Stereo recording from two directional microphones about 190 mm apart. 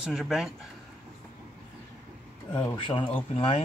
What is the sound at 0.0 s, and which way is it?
Speech, 5° right (ahead or behind).